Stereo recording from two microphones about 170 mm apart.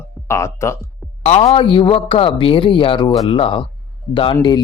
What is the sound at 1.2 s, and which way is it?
A man's voice, 40° left (ahead or behind).